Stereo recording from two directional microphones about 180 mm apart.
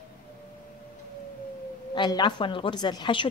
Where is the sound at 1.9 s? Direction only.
25° left (ahead or behind).